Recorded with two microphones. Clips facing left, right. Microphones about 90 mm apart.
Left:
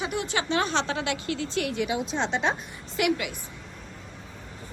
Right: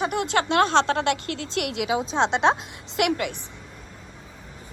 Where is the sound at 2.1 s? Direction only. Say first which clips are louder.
Right 10 dB; 90° right.